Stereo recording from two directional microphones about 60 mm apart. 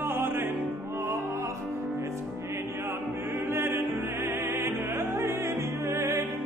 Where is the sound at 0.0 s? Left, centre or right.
Right.